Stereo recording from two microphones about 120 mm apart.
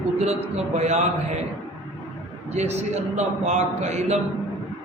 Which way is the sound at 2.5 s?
65° right (ahead or behind).